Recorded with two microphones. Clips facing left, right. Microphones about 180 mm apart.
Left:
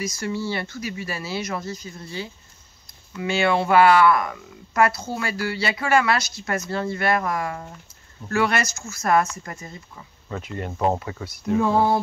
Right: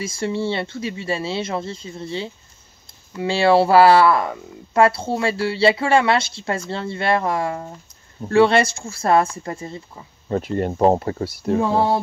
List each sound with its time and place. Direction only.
0.0 s a woman's voice: 30° right (ahead or behind)